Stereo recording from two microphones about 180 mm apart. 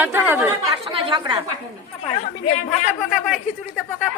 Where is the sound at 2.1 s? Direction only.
40° left (ahead or behind).